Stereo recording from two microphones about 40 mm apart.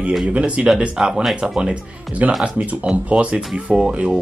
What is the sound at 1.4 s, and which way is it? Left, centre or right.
Speech, right.